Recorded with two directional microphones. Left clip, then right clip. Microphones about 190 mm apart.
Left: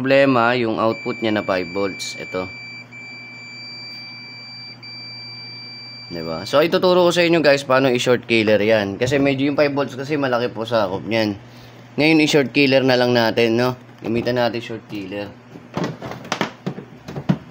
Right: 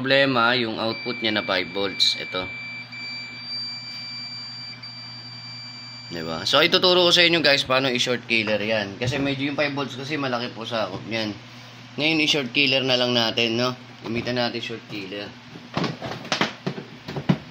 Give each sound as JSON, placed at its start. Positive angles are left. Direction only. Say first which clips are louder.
{"t": 0.0, "sound": "speech", "louder": "left 4 dB", "side_deg": 45}
{"t": 6.1, "sound": "speech", "louder": "left 2 dB", "side_deg": 35}
{"t": 12.0, "sound": "speech", "louder": "left 6 dB", "side_deg": 60}